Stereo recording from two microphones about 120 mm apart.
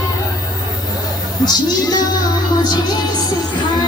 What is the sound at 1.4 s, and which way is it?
Music, 35° left (ahead or behind).